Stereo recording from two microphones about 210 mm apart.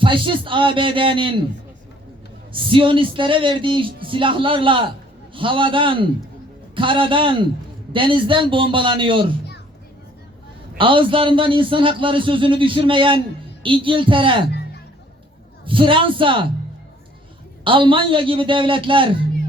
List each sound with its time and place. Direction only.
0.0 s a man's voice: 25° right (ahead or behind)
2.5 s a man's voice: 25° right (ahead or behind)
10.8 s a man's voice: 25° right (ahead or behind)
15.6 s a man's voice: 25° right (ahead or behind)
17.6 s a man's voice: 25° right (ahead or behind)